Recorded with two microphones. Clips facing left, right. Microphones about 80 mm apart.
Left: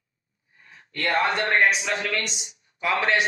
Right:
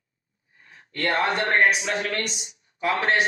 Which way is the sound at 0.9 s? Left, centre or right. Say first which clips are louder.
Even; right.